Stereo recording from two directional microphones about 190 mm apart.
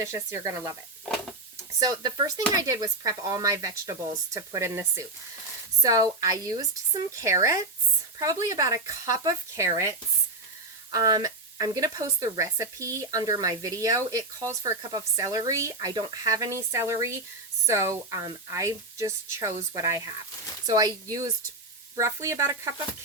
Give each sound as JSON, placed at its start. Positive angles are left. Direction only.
{"t": 0.0, "sound": "speech", "side_deg": -15}
{"t": 1.8, "sound": "speech", "side_deg": -20}
{"t": 10.9, "sound": "speech", "side_deg": -20}
{"t": 20.7, "sound": "speech", "side_deg": -20}